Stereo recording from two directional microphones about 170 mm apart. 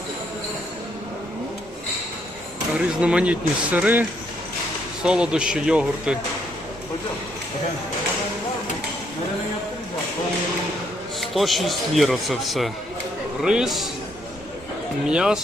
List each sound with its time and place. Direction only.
2.7 s speech: 5° right (ahead or behind)
5.0 s speech: 5° right (ahead or behind)
11.2 s speech: centre (ahead or behind)
15.1 s speech: 5° right (ahead or behind)